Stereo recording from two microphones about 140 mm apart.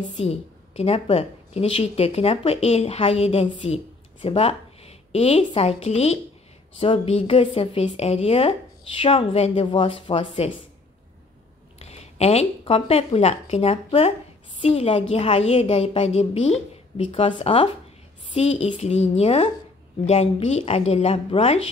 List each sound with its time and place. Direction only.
0.1 s a woman's voice: 45° left (ahead or behind)
11.8 s a woman's voice: 50° left (ahead or behind)